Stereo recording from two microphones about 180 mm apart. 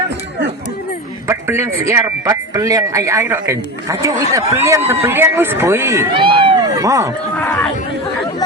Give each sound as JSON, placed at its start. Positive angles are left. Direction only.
{"t": 1.3, "sound": "speech", "side_deg": -15}
{"t": 6.1, "sound": "a sound", "side_deg": -25}
{"t": 7.3, "sound": "chatter", "side_deg": 5}